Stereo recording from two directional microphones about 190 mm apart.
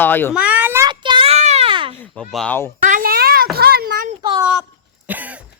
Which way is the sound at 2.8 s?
45° right (ahead or behind).